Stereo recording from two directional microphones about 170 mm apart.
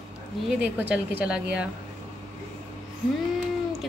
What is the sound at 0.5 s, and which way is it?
A woman's voice, 10° right (ahead or behind).